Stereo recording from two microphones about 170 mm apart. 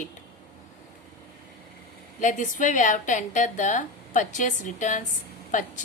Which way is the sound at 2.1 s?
50° left (ahead or behind).